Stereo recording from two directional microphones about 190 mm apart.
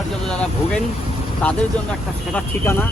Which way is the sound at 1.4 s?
5° left (ahead or behind).